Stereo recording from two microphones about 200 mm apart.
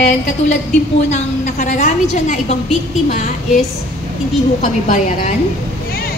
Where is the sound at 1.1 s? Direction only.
35° left (ahead or behind).